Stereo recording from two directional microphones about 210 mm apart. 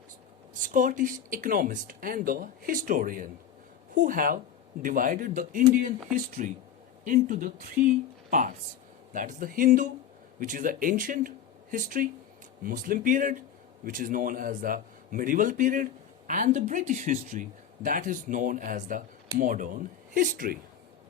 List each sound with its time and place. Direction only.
0.6 s a man's voice: 40° right (ahead or behind)
7.8 s speech: 5° right (ahead or behind)
8.3 s a man's voice: 40° right (ahead or behind)
12.6 s a man's voice: 40° right (ahead or behind)